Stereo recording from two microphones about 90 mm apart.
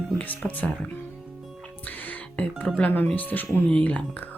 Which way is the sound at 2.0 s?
15° left (ahead or behind).